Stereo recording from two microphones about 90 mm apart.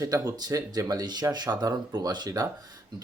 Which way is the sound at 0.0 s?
40° right (ahead or behind).